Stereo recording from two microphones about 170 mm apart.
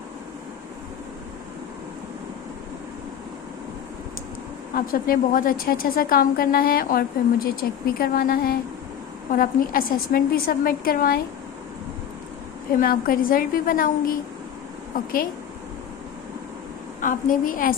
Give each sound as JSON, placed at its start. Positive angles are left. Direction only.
{"t": 4.7, "sound": "a woman's voice", "side_deg": 55}
{"t": 12.8, "sound": "a woman's voice", "side_deg": 55}
{"t": 17.0, "sound": "a woman's voice", "side_deg": 50}